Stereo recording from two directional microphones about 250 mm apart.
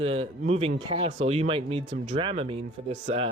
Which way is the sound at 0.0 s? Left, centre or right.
Right.